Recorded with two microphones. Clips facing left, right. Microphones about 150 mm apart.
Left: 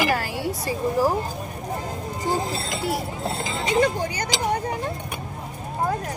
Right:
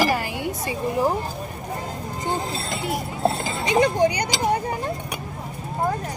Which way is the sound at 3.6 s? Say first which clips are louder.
Right 3 dB; 20° right (ahead or behind).